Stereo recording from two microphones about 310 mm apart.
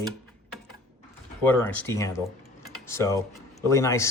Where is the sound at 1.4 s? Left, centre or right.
Centre.